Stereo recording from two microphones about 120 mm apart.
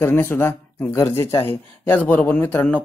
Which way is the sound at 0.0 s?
20° left (ahead or behind).